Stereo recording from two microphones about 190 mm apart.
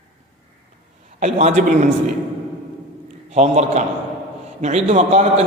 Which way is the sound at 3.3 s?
35° right (ahead or behind).